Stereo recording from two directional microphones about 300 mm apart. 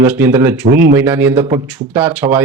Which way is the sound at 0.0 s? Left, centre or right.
Centre.